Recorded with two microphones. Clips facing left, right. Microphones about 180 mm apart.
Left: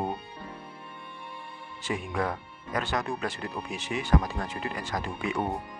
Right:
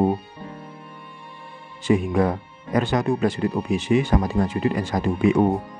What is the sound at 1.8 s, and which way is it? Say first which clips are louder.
Speech: right 11 dB; 20° right (ahead or behind).